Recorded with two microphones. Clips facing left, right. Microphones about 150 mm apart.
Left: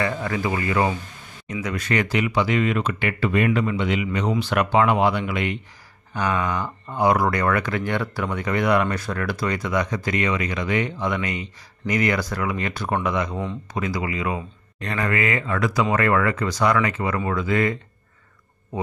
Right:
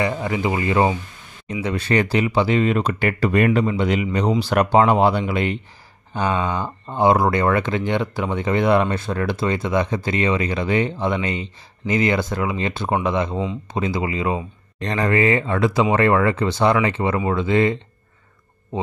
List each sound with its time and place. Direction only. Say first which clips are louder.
0.0 s speech: right 3 dB; 20° right (ahead or behind)